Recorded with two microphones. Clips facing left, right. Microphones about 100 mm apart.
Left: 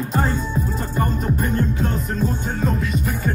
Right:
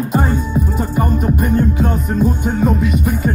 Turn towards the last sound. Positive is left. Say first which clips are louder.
# right 6 dB
turn(degrees=-15)  # may be behind; listen again after turning